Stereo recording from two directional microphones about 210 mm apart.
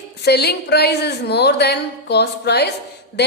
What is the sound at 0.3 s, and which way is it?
A woman's voice, 50° left (ahead or behind).